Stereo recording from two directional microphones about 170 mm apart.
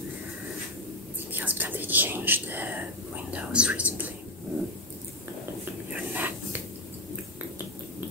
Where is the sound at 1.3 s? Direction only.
10° right (ahead or behind).